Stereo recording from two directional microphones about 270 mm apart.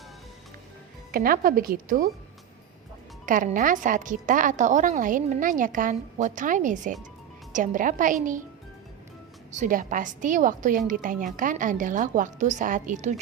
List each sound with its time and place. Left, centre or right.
1.1 s speech: right
3.2 s a woman's voice: right
9.5 s a woman's voice: right